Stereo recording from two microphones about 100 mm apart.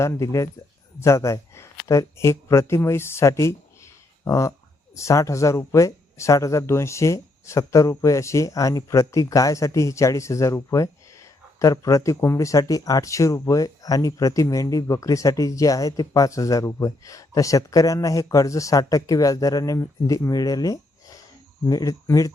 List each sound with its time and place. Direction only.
0.0 s speech: 30° left (ahead or behind)